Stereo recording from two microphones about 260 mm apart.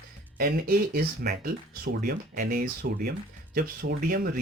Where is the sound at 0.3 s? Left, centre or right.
Right.